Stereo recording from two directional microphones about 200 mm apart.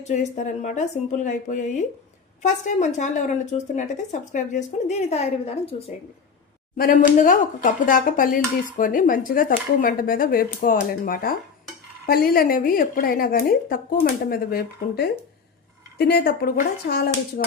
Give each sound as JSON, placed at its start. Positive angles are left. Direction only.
{"t": 0.0, "sound": "a woman's voice", "side_deg": 35}
{"t": 6.7, "sound": "speech", "side_deg": 45}